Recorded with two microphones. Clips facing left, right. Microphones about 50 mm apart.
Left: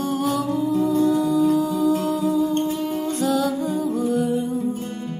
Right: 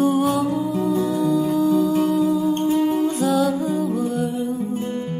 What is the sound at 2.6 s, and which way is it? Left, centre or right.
Humming, right.